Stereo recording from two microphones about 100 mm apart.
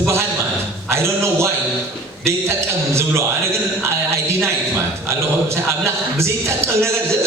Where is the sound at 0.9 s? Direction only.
25° right (ahead or behind).